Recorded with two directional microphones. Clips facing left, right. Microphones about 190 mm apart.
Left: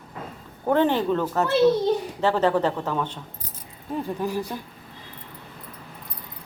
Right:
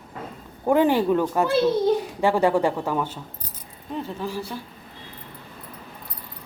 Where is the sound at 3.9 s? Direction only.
10° left (ahead or behind).